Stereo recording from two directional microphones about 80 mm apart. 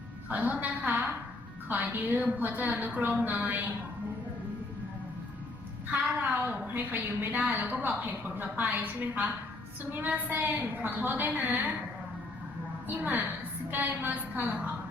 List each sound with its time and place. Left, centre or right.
0.3 s a woman's voice: centre
5.9 s a woman's voice: centre
13.0 s a woman's voice: right